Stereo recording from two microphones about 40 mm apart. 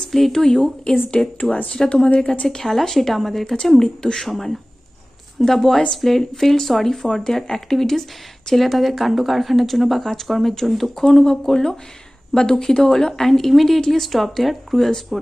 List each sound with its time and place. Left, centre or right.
0.1 s speech: centre
1.4 s speech: left
1.7 s speech: centre
2.4 s speech: centre
4.0 s speech: centre